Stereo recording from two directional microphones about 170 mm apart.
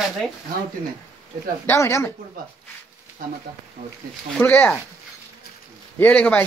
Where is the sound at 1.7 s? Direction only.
15° left (ahead or behind).